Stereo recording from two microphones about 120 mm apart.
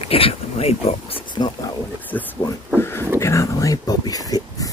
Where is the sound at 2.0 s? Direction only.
15° left (ahead or behind).